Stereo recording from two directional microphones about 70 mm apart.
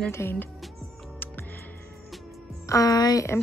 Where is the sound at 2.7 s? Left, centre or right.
Left.